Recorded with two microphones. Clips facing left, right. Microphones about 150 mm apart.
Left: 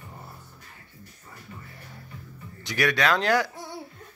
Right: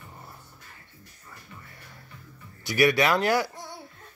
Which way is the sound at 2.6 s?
10° right (ahead or behind).